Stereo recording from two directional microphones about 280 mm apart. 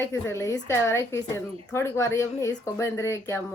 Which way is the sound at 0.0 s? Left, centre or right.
Centre.